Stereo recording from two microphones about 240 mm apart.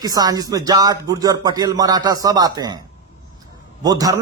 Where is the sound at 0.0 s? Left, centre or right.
Centre.